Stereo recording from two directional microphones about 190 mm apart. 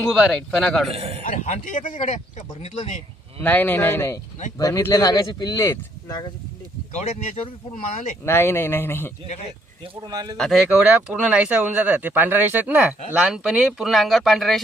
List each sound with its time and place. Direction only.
0.1 s speech: centre (ahead or behind)
0.9 s a man's voice: 30° right (ahead or behind)
1.2 s speech: 40° left (ahead or behind)
3.4 s speech: 10° left (ahead or behind)
8.2 s speech: 15° left (ahead or behind)
9.8 s speech: 25° right (ahead or behind)
10.3 s speech: centre (ahead or behind)